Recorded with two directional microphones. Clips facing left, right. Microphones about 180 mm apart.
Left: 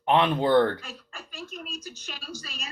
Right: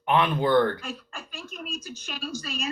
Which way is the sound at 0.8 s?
50° right (ahead or behind).